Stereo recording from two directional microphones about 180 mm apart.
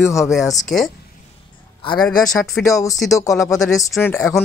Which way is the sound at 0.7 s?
Centre (ahead or behind).